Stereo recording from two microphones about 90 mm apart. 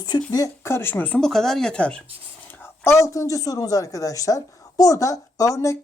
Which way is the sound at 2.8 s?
30° left (ahead or behind).